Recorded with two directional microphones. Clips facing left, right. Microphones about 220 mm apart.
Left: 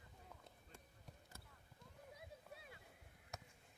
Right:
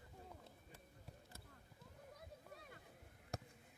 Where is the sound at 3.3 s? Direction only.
35° right (ahead or behind).